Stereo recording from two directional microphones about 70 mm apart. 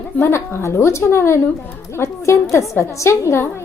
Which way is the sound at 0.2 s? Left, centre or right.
Left.